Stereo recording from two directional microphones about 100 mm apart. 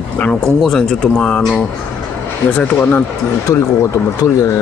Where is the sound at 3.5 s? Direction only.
30° left (ahead or behind).